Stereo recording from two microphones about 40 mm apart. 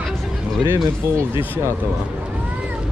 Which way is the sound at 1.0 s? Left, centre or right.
Right.